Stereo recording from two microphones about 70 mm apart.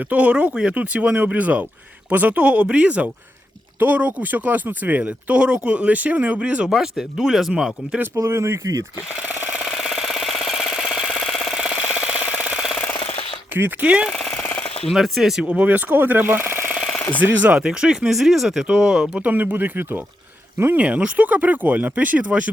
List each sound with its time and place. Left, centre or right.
0.1 s speech: right
8.2 s speech: right
9.7 s a sound: centre
13.8 s speech: centre
14.1 s speech: centre
15.4 s speech: right
17.4 s speech: centre
19.1 s speech: right